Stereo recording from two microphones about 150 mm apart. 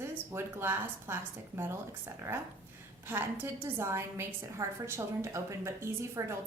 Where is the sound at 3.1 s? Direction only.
15° right (ahead or behind).